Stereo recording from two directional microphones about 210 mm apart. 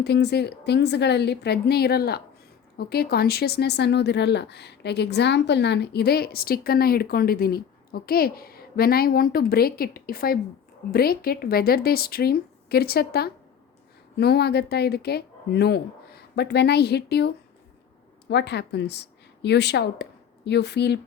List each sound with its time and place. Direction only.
0.0 s speech: 50° left (ahead or behind)